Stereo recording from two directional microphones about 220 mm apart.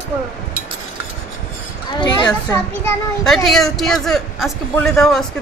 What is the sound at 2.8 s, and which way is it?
Speech, 10° left (ahead or behind).